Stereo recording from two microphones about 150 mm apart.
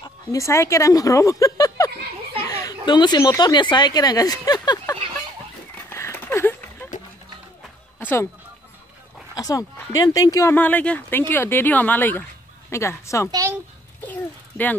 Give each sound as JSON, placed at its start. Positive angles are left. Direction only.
{"t": 0.0, "sound": "speech", "side_deg": 20}
{"t": 2.3, "sound": "children playing", "side_deg": 25}
{"t": 3.2, "sound": "speech", "side_deg": 20}
{"t": 5.9, "sound": "a sound", "side_deg": 15}
{"t": 8.0, "sound": "a sound", "side_deg": 15}
{"t": 9.3, "sound": "speech", "side_deg": 25}
{"t": 13.3, "sound": "speech", "side_deg": -20}